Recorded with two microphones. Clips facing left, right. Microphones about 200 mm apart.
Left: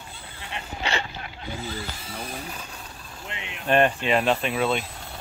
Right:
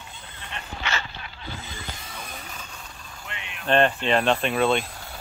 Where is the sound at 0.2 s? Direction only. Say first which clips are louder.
Left 3 dB; 10° left (ahead or behind).